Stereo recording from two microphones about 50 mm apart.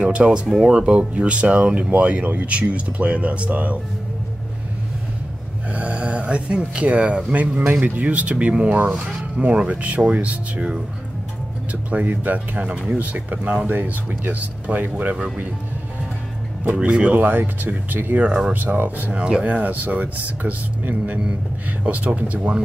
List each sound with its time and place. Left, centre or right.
0.0 s speech: right
5.7 s speech: right
7.3 s speech: right
16.8 s speech: right
17.2 s speech: right
19.1 s speech: centre
19.4 s speech: right